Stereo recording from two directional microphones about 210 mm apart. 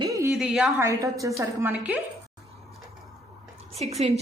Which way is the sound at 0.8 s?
15° right (ahead or behind).